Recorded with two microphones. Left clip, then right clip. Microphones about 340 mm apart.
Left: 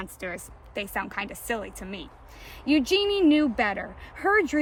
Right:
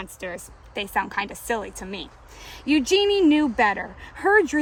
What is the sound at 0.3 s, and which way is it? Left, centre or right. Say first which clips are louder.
Speech: right 3 dB; centre.